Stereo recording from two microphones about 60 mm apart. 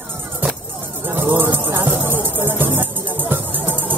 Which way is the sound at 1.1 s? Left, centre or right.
Right.